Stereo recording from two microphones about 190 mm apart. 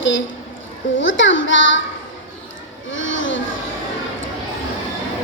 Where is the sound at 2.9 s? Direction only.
80° left.